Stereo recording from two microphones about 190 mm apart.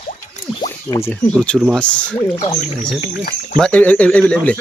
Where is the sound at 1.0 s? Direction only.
10° left (ahead or behind).